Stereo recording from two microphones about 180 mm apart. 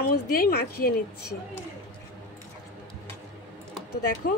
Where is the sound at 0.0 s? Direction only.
55° left (ahead or behind).